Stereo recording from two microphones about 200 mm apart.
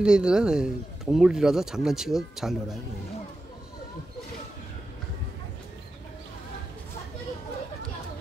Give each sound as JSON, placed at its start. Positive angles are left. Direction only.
{"t": 0.0, "sound": "speech", "side_deg": -5}